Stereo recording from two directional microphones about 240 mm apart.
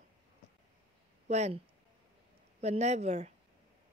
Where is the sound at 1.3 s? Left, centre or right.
Right.